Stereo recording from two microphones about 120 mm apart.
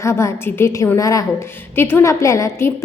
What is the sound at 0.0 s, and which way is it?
A woman's voice, 25° left (ahead or behind).